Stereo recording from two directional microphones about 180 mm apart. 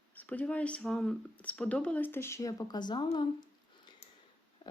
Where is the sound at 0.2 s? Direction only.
10° left (ahead or behind); by 3.2 s 25° left (ahead or behind).